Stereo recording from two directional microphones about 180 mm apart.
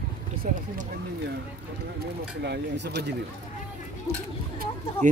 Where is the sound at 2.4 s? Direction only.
70° right (ahead or behind).